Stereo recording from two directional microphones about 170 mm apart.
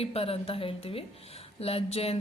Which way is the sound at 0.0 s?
35° left (ahead or behind).